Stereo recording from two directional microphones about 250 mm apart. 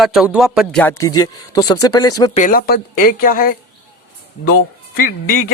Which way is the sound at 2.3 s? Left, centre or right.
Left.